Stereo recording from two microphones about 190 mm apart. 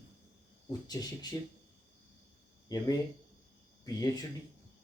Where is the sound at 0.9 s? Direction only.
20° left (ahead or behind).